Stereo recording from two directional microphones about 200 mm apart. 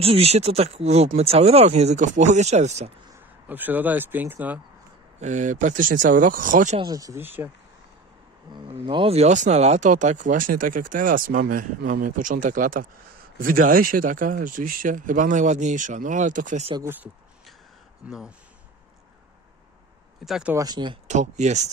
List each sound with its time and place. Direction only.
0.0 s speech: 30° right (ahead or behind)
3.4 s speech: 10° right (ahead or behind)
5.2 s speech: 40° right (ahead or behind)
6.8 s speech: 20° right (ahead or behind)
8.5 s speech: 25° right (ahead or behind); by 16.6 s 40° right (ahead or behind)
16.8 s a sound: 10° right (ahead or behind)
20.2 s speech: 5° right (ahead or behind)
20.5 s speech: 20° right (ahead or behind)
21.1 s speech: 35° right (ahead or behind)